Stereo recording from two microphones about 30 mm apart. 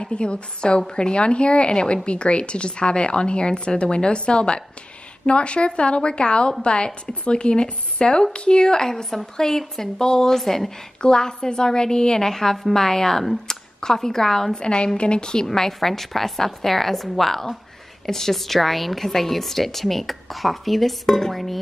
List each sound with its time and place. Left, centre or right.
0.0 s speech: left
8.9 s a woman's voice: centre
11.0 s a woman's voice: left
12.3 s a woman's voice: centre
14.5 s speech: left
15.4 s a woman's voice: centre